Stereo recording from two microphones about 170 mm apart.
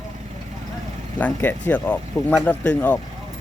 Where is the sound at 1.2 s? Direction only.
10° left (ahead or behind).